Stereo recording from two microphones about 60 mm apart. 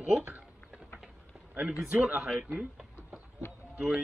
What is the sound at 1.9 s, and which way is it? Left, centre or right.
Speech, right.